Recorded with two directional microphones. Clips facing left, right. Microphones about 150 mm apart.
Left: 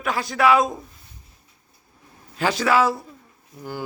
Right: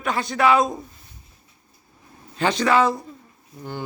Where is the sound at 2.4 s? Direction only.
5° left (ahead or behind).